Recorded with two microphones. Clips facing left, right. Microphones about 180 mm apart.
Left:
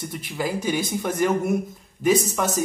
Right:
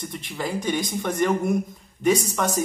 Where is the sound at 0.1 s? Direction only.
5° left (ahead or behind).